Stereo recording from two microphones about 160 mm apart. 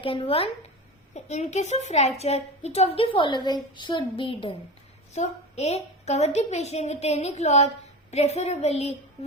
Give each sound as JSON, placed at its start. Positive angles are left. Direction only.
{"t": 0.0, "sound": "a child's voice", "side_deg": 35}
{"t": 5.1, "sound": "a woman's voice", "side_deg": 45}